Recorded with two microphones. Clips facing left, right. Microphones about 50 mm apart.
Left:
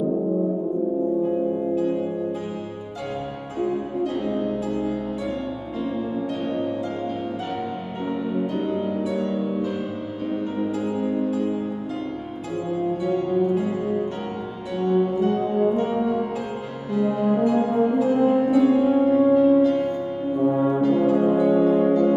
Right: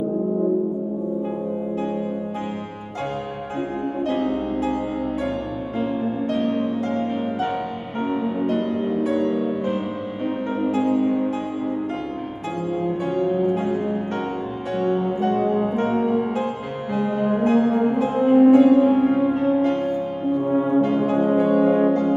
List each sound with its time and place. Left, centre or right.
3.5 s music: right
8.0 s music: right
8.5 s music: right
12.7 s music: right
20.3 s french horn: right
20.8 s music: right